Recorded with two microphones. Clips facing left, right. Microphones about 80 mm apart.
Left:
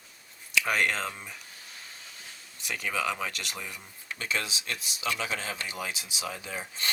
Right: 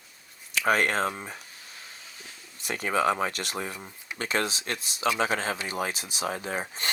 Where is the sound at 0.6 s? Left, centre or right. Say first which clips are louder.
Right 4 dB; right.